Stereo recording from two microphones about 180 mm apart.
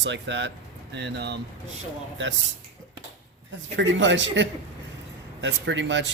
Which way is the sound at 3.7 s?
90° right.